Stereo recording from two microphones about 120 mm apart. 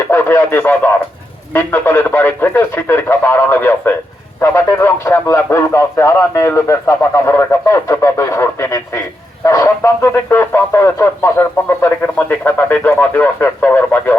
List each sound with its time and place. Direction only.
0.1 s speech: 20° left (ahead or behind)